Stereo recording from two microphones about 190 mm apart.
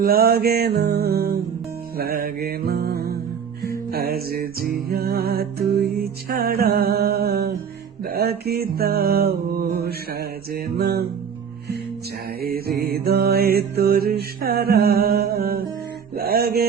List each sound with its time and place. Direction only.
0.0 s music: 55° right (ahead or behind)
12.4 s music: 55° right (ahead or behind)
16.1 s mantra: 50° right (ahead or behind)